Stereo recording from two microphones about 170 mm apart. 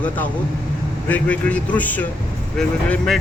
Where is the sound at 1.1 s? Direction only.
10° left (ahead or behind).